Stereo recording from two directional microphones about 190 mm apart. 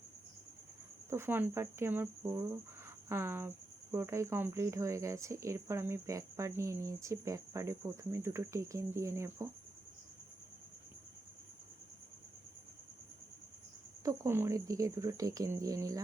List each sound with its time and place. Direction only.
1.1 s speech: 10° right (ahead or behind)
14.0 s speech: 15° right (ahead or behind)